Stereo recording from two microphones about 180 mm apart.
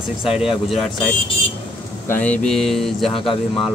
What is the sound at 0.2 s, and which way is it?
Speech, 5° right (ahead or behind).